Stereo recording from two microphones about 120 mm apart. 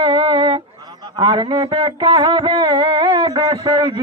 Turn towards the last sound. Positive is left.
turn(degrees=-45)  # may be behind; listen again after turning